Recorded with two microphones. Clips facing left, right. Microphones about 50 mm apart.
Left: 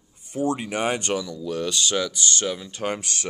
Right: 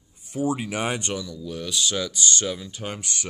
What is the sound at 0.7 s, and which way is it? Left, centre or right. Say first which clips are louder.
Speech: left 3 dB; centre.